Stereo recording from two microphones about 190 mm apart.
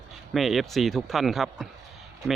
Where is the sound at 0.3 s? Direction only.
Centre (ahead or behind).